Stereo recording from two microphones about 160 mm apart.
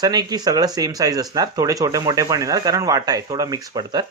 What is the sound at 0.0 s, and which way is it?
A man's voice, 25° right (ahead or behind).